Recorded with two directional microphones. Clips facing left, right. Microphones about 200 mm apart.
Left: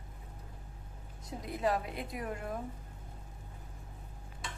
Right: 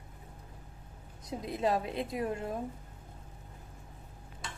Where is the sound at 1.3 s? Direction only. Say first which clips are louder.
Right 2 dB; 25° right (ahead or behind).